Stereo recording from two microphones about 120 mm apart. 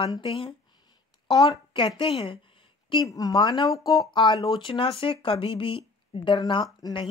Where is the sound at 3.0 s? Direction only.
30° left (ahead or behind); by 6.4 s 50° left (ahead or behind).